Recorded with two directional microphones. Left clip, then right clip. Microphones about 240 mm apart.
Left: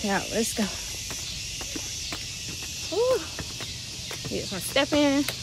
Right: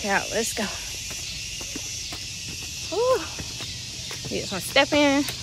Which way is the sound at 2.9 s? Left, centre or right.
Centre.